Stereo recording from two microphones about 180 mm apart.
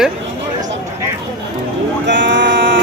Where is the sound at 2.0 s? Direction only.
85° right.